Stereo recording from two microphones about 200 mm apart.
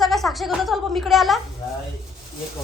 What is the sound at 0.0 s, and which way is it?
A woman's voice, centre (ahead or behind).